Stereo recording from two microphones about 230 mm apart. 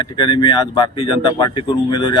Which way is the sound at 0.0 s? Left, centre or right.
Centre.